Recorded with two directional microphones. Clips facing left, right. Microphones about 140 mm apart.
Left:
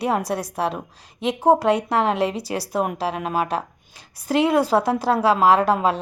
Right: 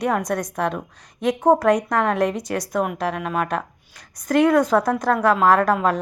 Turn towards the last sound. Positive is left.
turn(degrees=25)  # may be behind; listen again after turning